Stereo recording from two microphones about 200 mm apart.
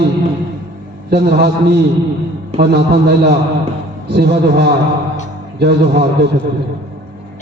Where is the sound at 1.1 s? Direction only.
55° right (ahead or behind).